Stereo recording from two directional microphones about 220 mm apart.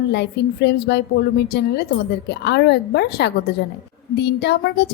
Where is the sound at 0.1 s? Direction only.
50° left (ahead or behind).